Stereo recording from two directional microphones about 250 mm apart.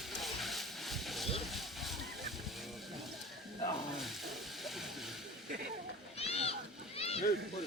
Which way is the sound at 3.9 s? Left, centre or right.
Centre.